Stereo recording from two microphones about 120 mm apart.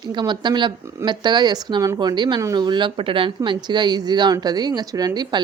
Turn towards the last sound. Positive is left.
turn(degrees=-35)  # may be behind; listen again after turning